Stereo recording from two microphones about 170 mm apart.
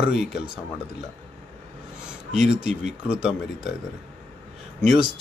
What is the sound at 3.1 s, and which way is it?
Speech, 5° right (ahead or behind).